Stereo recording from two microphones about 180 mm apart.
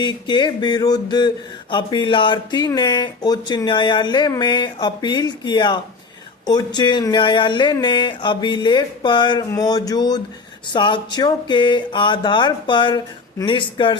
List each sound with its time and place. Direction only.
0.0 s speech: 25° left (ahead or behind)